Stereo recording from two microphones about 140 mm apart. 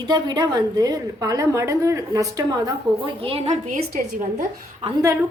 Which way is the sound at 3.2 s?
45° right (ahead or behind).